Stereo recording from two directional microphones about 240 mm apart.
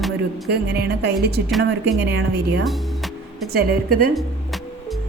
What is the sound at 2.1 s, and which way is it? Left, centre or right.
Speech, right.